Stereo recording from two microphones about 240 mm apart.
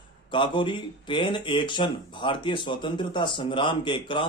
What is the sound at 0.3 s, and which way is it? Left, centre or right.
Speech, centre.